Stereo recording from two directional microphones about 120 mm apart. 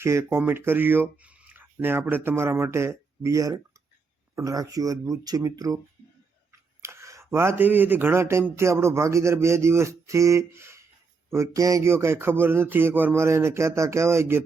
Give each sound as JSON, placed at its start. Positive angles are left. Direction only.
{"t": 0.0, "sound": "speech", "side_deg": -25}
{"t": 6.8, "sound": "speech", "side_deg": -25}